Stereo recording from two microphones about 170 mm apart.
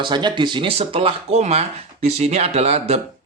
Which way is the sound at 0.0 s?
25° right (ahead or behind).